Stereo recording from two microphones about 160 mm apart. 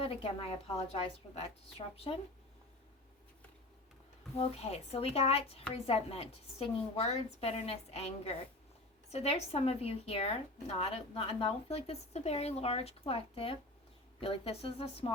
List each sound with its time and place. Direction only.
0.0 s speech: 35° left (ahead or behind)
4.4 s speech: 40° left (ahead or behind)